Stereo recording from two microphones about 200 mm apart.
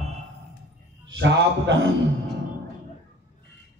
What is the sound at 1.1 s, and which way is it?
Speech, 65° right (ahead or behind).